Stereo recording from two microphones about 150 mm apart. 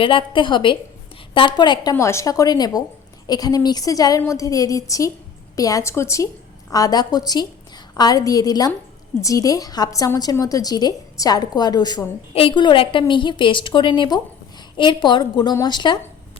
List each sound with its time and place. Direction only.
0.0 s a woman's voice: 35° left (ahead or behind)
12.3 s a woman's voice: 40° left (ahead or behind)